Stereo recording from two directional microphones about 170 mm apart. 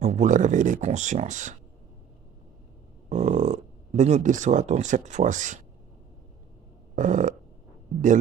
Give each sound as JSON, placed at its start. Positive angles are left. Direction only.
{"t": 0.0, "sound": "speech", "side_deg": -45}
{"t": 3.1, "sound": "speech", "side_deg": -45}
{"t": 7.0, "sound": "speech", "side_deg": -45}